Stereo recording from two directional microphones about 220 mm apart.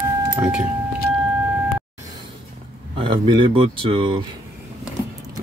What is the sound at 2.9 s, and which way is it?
Speech, 25° right (ahead or behind).